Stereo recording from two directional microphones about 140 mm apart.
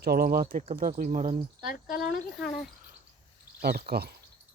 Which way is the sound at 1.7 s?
90° left.